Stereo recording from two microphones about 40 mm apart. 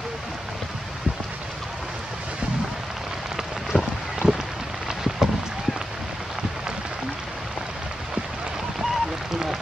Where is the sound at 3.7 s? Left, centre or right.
Right.